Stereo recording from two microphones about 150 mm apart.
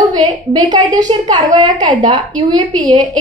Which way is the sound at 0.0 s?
30° right (ahead or behind).